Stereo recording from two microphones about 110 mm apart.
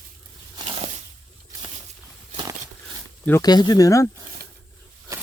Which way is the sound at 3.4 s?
40° left (ahead or behind).